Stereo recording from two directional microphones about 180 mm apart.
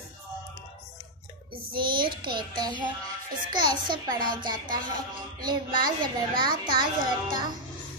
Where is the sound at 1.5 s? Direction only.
25° right (ahead or behind).